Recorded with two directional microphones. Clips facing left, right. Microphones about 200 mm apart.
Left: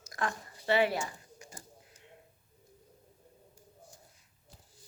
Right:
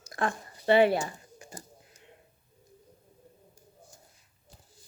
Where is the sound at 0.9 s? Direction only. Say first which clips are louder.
Right 5 dB; 35° right (ahead or behind).